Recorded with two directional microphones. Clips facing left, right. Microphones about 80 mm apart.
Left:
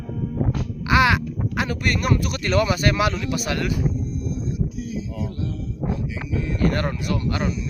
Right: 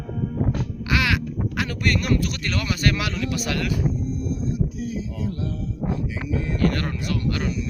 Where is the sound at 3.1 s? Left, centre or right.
Left.